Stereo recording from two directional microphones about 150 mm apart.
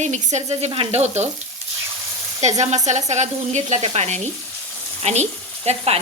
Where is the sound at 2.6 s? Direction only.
50° right (ahead or behind).